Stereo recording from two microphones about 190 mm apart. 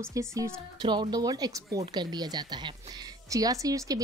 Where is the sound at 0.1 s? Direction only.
15° right (ahead or behind).